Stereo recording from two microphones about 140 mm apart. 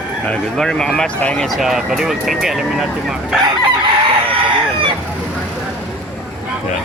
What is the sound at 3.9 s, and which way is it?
Chicken, 40° right (ahead or behind).